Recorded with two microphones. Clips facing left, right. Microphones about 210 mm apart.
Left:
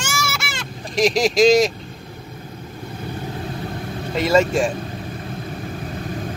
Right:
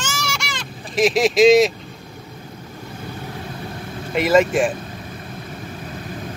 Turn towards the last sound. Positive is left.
turn(degrees=-5)  # may be behind; listen again after turning